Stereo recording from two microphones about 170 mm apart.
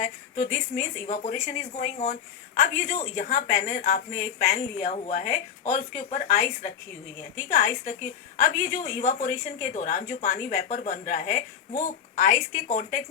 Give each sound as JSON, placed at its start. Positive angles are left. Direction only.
{"t": 0.0, "sound": "a woman's voice", "side_deg": 50}